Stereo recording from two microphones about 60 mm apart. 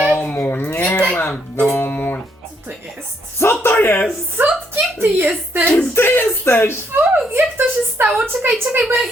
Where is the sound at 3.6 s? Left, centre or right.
Left.